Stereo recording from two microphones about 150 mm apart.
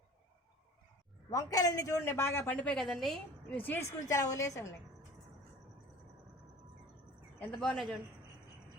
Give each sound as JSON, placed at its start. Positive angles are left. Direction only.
{"t": 1.3, "sound": "a woman's voice", "side_deg": 25}
{"t": 3.6, "sound": "a woman's voice", "side_deg": 15}
{"t": 7.3, "sound": "speech", "side_deg": 5}